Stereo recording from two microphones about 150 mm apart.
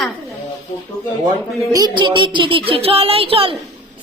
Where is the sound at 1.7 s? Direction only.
30° right (ahead or behind).